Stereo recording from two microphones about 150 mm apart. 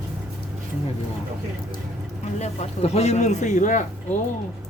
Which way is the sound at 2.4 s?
45° left (ahead or behind).